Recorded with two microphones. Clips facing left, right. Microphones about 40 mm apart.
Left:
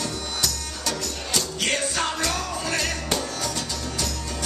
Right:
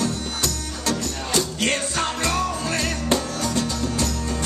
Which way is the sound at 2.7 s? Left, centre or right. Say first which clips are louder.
Right 4 dB; right.